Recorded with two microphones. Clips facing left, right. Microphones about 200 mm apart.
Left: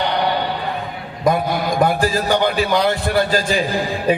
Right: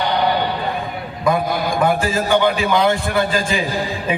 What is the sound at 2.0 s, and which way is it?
A man's voice, 40° left (ahead or behind).